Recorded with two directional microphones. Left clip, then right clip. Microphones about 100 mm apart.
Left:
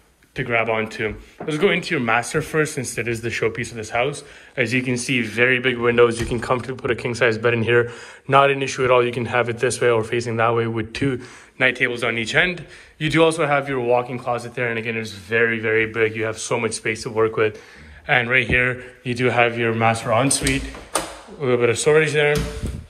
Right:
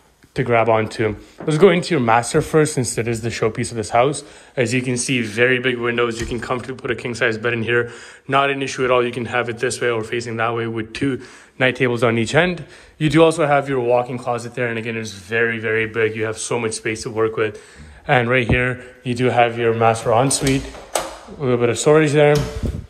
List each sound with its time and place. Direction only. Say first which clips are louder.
0.5 s speech: right 5 dB; 90° right
4.6 s speech: right 1 dB; 45° right (ahead or behind)
5.8 s speech: left 4 dB; 15° right (ahead or behind)
11.7 s speech: right 3 dB; 65° right (ahead or behind)
12.4 s speech: right 1 dB; 50° right (ahead or behind); by 17.6 s 20° right (ahead or behind)
18.0 s speech: right 1 dB; 55° right (ahead or behind)
18.7 s speech: even; 30° right (ahead or behind)
20.3 s speech: right 2 dB; 50° right (ahead or behind)